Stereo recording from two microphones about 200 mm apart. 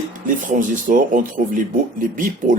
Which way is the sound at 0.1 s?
40° right (ahead or behind).